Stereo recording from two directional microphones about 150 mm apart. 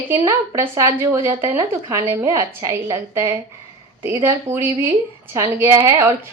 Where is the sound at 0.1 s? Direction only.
20° right (ahead or behind).